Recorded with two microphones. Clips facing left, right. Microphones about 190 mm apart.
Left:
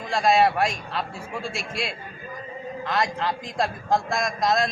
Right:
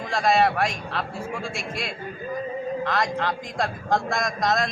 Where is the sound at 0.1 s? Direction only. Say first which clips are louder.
Left 1 dB; centre (ahead or behind).